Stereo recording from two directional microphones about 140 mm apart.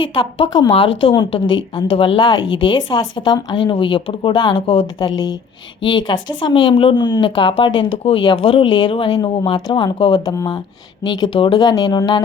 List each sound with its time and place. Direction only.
0.0 s a woman's voice: 35° left (ahead or behind)